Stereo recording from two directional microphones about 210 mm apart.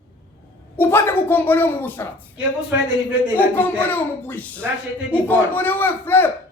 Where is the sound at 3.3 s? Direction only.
10° left (ahead or behind).